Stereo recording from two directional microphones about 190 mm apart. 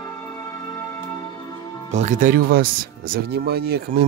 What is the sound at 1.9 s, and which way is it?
Speech, 40° right (ahead or behind).